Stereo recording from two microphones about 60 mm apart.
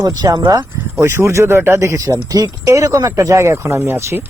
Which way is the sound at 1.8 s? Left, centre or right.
Right.